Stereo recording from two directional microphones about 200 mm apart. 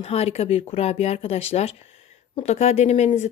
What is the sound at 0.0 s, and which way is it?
Speech, 30° left (ahead or behind).